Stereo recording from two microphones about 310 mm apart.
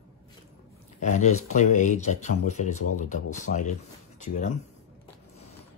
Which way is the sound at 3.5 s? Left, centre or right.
Left.